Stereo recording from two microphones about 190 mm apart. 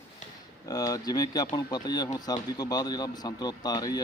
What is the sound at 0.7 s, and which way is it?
Speech, 20° left (ahead or behind).